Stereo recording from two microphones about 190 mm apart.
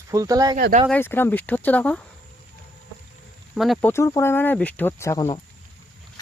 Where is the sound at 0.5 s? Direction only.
45° right (ahead or behind).